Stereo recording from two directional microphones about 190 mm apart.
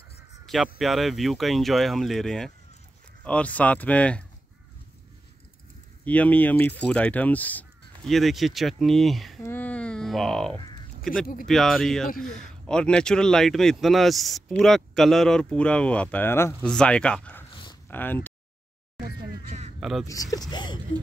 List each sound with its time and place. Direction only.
0.7 s speech: centre (ahead or behind)
6.0 s speech: 10° left (ahead or behind)
9.4 s a sound: 10° left (ahead or behind)
11.1 s speech: 5° left (ahead or behind)
19.8 s speech: centre (ahead or behind)
20.1 s speech: 20° left (ahead or behind)